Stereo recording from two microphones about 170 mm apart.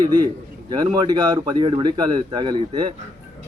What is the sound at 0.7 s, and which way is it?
A man's voice, 25° right (ahead or behind).